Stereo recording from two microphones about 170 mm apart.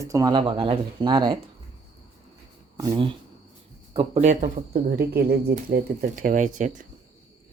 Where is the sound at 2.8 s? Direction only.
20° right (ahead or behind).